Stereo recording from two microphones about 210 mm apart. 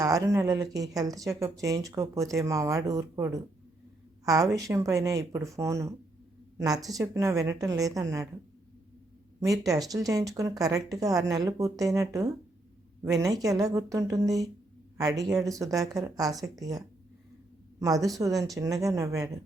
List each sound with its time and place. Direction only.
0.0 s speech: 15° right (ahead or behind)
4.6 s speech: 15° right (ahead or behind)
9.4 s a woman's voice: 15° right (ahead or behind)